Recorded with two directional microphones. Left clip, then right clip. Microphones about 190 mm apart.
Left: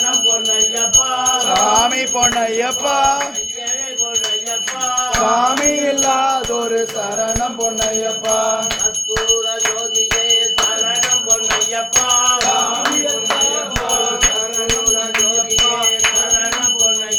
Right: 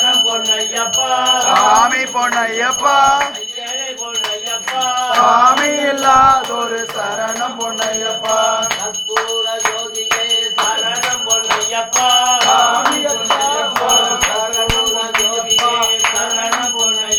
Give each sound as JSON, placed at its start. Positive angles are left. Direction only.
{"t": 1.7, "sound": "jingle bell", "side_deg": 35}
{"t": 5.3, "sound": "music", "side_deg": 25}